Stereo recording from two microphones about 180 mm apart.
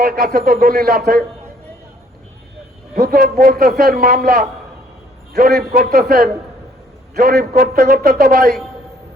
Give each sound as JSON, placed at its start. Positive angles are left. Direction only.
{"t": 0.0, "sound": "a man's voice", "side_deg": -55}
{"t": 2.9, "sound": "a man's voice", "side_deg": -55}